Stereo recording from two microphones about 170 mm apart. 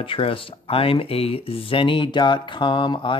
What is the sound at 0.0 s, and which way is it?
Speech, 30° left (ahead or behind).